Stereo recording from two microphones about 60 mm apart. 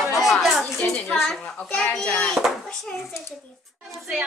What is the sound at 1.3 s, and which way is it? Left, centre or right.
Speech, centre.